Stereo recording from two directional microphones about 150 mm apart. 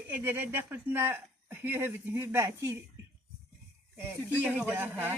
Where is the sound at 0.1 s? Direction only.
15° right (ahead or behind).